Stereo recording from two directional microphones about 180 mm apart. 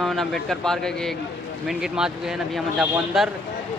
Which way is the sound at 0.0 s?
Centre (ahead or behind).